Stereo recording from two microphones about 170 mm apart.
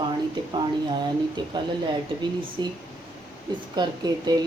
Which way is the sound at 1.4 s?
25° right (ahead or behind).